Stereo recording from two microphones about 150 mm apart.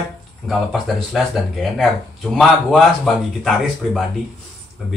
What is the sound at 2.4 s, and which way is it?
Speech, centre (ahead or behind).